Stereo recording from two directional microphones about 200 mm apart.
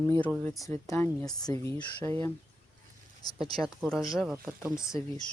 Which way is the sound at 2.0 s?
10° left (ahead or behind).